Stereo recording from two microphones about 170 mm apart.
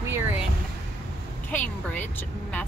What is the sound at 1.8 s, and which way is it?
Speech, 10° left (ahead or behind).